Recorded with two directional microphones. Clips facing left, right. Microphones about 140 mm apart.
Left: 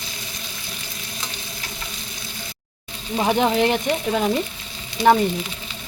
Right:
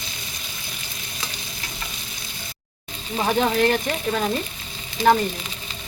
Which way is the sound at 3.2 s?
15° left (ahead or behind).